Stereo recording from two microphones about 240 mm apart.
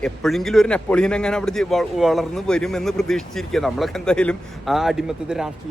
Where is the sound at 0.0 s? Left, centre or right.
Centre.